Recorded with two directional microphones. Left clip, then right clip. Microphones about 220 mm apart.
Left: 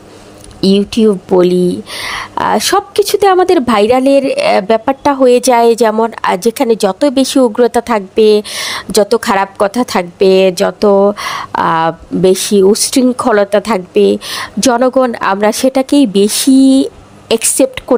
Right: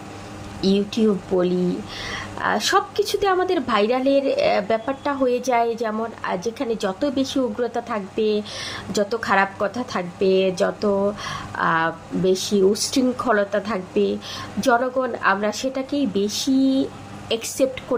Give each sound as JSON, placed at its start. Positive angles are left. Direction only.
{"t": 0.6, "sound": "speech", "side_deg": 40}